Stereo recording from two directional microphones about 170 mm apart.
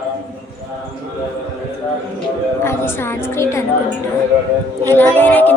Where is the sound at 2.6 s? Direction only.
15° left (ahead or behind).